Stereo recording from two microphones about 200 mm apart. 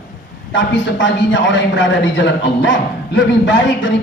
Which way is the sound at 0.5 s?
65° left (ahead or behind).